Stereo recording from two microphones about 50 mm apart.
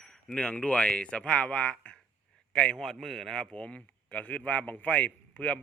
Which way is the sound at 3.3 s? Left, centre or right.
Centre.